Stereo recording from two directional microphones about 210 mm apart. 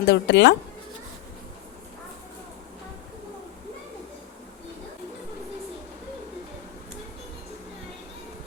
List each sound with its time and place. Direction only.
0.0 s speech: 55° left (ahead or behind)